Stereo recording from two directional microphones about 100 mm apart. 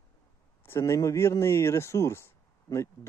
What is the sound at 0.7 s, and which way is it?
Speech, 30° left (ahead or behind).